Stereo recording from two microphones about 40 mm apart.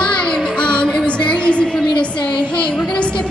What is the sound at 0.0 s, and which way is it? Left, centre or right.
Music, left.